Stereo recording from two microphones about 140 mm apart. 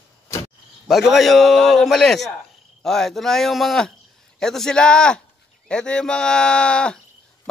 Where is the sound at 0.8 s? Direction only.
Centre (ahead or behind).